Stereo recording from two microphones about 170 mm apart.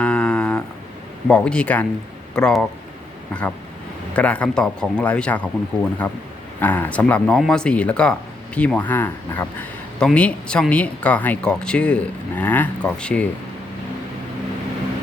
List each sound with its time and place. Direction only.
0.0 s a sound: 5° left (ahead or behind)
1.3 s speech: 5° left (ahead or behind)
4.1 s speech: 5° left (ahead or behind)